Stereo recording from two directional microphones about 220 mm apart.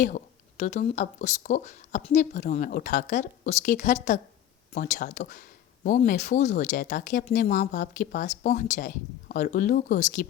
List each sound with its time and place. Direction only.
0.0 s speech: 35° left (ahead or behind)